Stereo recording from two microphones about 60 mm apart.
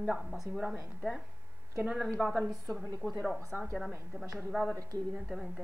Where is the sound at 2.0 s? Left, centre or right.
Centre.